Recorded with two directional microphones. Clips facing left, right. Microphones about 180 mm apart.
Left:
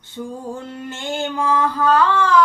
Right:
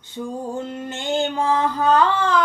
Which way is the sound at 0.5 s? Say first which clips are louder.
Right 2 dB; 20° right (ahead or behind).